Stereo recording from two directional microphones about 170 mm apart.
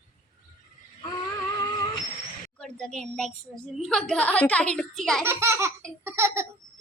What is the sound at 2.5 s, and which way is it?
A child's voice, 5° left (ahead or behind).